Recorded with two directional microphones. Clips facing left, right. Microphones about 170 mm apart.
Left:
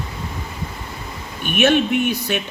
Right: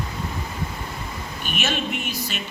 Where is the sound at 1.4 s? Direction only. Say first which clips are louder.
Left 11 dB; 60° left (ahead or behind).